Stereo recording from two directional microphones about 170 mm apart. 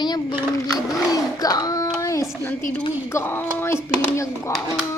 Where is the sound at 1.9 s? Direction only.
20° left (ahead or behind).